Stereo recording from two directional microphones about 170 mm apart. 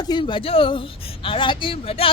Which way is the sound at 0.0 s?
25° left (ahead or behind).